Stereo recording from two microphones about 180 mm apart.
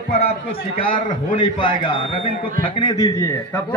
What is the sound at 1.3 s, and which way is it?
A man's voice, 30° left (ahead or behind).